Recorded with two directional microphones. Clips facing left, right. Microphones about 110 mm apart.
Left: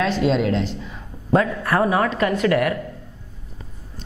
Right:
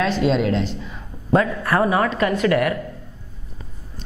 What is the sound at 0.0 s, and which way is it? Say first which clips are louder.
A woman's voice: even; 10° right (ahead or behind).